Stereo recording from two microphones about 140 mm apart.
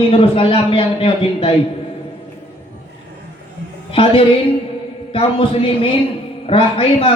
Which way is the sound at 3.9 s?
40° left (ahead or behind).